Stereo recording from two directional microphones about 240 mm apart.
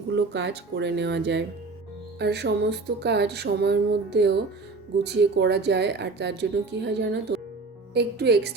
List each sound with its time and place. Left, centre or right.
0.2 s music: right